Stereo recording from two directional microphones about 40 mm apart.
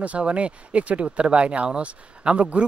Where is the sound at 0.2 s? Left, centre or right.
Right.